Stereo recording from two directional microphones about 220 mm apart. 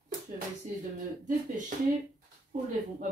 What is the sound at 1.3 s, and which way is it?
Speech, 35° right (ahead or behind).